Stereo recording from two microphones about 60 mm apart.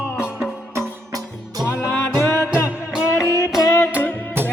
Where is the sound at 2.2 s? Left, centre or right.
Left.